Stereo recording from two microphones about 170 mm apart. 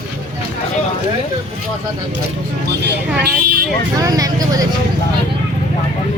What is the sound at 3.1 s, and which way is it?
Vehicle, 70° right (ahead or behind).